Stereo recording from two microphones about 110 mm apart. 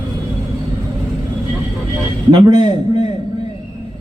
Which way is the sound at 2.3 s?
40° right (ahead or behind).